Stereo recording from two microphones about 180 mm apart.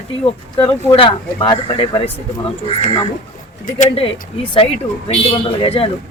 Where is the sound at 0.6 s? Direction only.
30° left (ahead or behind).